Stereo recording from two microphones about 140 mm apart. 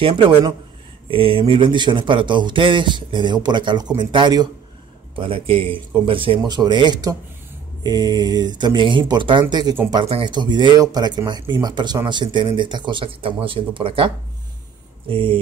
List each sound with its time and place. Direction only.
0.0 s speech: 35° right (ahead or behind)